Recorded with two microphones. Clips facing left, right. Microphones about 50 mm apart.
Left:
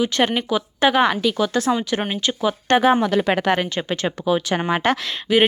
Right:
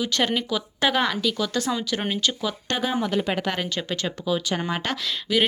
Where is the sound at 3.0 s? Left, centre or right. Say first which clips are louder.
Left 6 dB; left.